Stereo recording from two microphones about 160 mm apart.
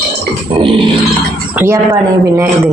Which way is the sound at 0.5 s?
30° right (ahead or behind).